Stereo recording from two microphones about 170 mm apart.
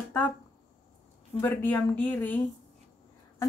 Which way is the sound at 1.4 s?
10° left (ahead or behind).